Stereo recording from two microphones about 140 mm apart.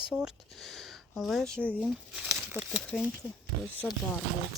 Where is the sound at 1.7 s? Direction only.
5° right (ahead or behind).